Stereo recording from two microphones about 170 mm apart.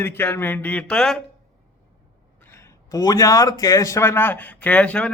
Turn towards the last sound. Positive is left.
turn(degrees=10)  # may be behind; listen again after turning